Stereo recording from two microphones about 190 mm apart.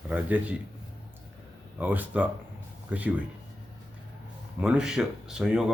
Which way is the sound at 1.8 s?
10° right (ahead or behind).